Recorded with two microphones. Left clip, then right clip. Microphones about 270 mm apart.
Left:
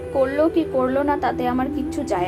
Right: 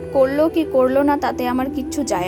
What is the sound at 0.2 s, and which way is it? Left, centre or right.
A woman's voice, right.